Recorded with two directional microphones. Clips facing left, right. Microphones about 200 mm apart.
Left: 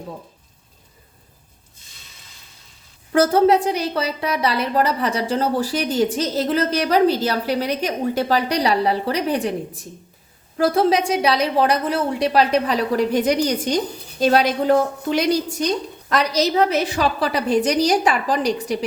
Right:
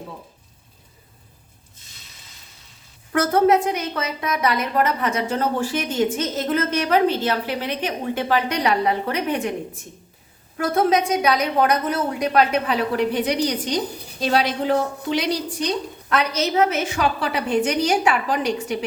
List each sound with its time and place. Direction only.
3.1 s a woman's voice: 30° left (ahead or behind)